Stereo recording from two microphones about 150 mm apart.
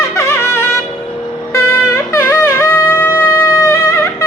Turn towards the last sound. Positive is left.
turn(degrees=20)  # may be behind; listen again after turning